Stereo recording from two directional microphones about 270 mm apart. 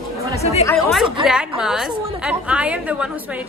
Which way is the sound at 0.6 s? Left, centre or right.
Centre.